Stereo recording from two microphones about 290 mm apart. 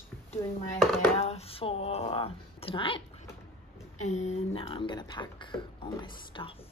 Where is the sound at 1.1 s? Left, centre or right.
Left.